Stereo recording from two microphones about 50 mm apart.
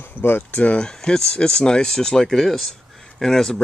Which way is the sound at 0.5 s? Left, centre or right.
Left.